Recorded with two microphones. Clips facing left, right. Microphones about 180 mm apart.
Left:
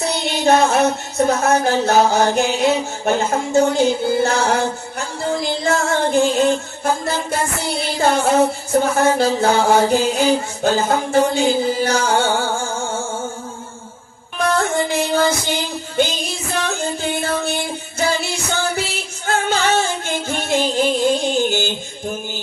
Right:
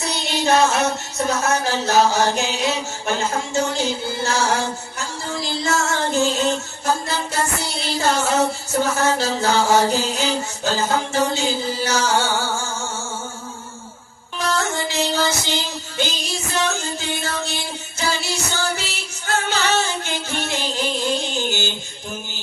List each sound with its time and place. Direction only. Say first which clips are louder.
0.0 s music: left 4 dB; 55° left (ahead or behind)
14.3 s music: left 5 dB; 55° left (ahead or behind)